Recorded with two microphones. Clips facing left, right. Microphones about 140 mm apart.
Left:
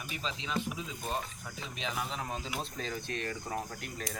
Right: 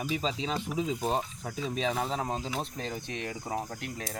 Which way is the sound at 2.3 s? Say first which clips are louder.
Right 5 dB; 25° right (ahead or behind).